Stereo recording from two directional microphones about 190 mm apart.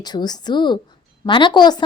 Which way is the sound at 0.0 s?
20° left (ahead or behind).